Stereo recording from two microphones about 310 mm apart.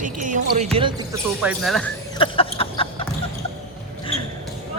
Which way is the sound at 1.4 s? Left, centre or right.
Centre.